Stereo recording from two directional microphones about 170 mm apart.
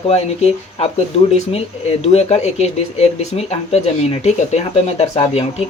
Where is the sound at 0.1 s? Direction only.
35° left (ahead or behind).